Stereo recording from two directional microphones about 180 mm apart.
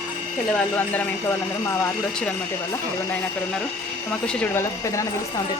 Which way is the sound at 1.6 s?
10° left (ahead or behind).